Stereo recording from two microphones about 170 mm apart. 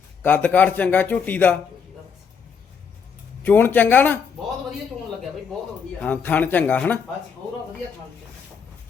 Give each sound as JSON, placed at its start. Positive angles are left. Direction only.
{"t": 0.2, "sound": "a man's voice", "side_deg": 10}
{"t": 3.4, "sound": "a man's voice", "side_deg": 10}
{"t": 6.0, "sound": "a man's voice", "side_deg": 10}